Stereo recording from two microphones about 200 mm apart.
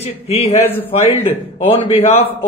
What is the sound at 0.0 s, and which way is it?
Speech, 30° left (ahead or behind).